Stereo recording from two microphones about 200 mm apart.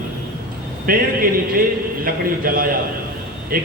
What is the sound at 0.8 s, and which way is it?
A man's voice, 45° right (ahead or behind).